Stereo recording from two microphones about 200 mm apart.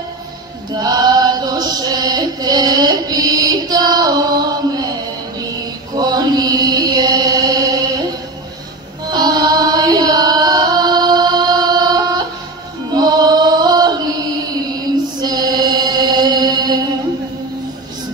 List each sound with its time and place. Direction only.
0.7 s chant: 20° right (ahead or behind)
5.9 s chant: 20° right (ahead or behind)
9.1 s music: 20° right (ahead or behind)